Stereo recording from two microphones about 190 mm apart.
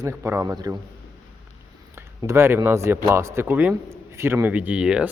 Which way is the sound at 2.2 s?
15° right (ahead or behind).